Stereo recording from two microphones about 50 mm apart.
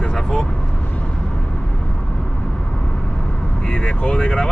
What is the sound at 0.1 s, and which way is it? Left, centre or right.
Vehicle, centre.